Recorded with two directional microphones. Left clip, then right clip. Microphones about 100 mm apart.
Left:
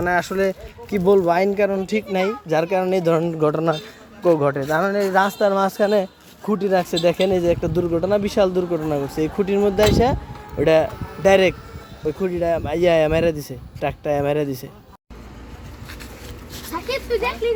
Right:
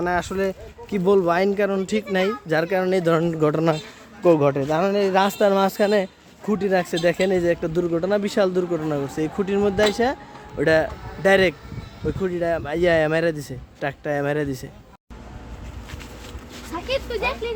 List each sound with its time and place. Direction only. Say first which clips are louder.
0.0 s speech: left 3 dB; 5° left (ahead or behind)
0.9 s speech: left 2 dB; 5° right (ahead or behind)
1.2 s speech: left 2 dB; 15° right (ahead or behind)
3.2 s speech: left 1 dB; 35° right (ahead or behind)
5.9 s a man's voice: left 1 dB; 10° right (ahead or behind)
16.7 s a sound: left 2 dB; 35° left (ahead or behind)
17.2 s speech: left 3 dB; 20° left (ahead or behind)